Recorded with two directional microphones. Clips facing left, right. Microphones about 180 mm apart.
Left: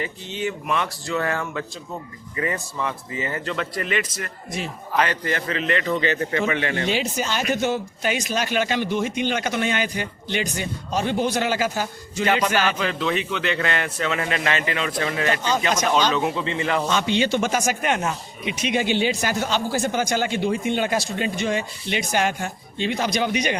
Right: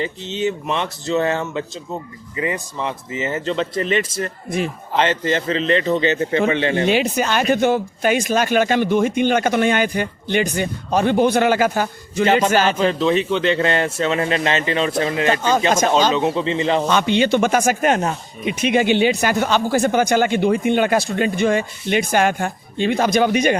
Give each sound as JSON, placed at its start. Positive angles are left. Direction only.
{"t": 0.0, "sound": "a man's voice", "side_deg": -25}
{"t": 4.4, "sound": "speech", "side_deg": -55}
{"t": 4.9, "sound": "a man's voice", "side_deg": -25}
{"t": 6.8, "sound": "speech", "side_deg": -60}
{"t": 12.7, "sound": "a man's voice", "side_deg": -35}
{"t": 16.9, "sound": "speech", "side_deg": -60}
{"t": 18.5, "sound": "speech", "side_deg": -55}